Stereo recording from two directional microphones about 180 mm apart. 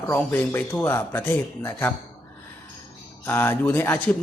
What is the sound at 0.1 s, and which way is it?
A man's voice, 10° left (ahead or behind).